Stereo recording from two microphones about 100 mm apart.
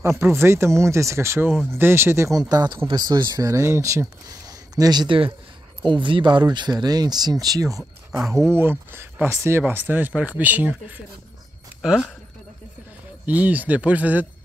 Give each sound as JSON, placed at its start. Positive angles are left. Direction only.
{"t": 0.0, "sound": "speech", "side_deg": -25}
{"t": 2.5, "sound": "speech", "side_deg": -45}
{"t": 13.2, "sound": "speech", "side_deg": -15}